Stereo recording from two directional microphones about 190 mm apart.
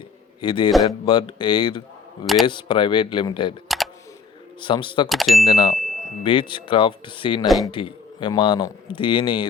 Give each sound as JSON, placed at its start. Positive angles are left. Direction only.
{"t": 0.4, "sound": "a man's voice", "side_deg": 25}
{"t": 2.2, "sound": "speech", "side_deg": 0}
{"t": 2.5, "sound": "a man's voice", "side_deg": 25}
{"t": 3.7, "sound": "camera", "side_deg": 0}
{"t": 4.6, "sound": "a man's voice", "side_deg": 25}
{"t": 5.0, "sound": "speech", "side_deg": 0}
{"t": 6.2, "sound": "a man's voice", "side_deg": 25}
{"t": 7.4, "sound": "speech", "side_deg": 0}
{"t": 7.7, "sound": "a man's voice", "side_deg": 25}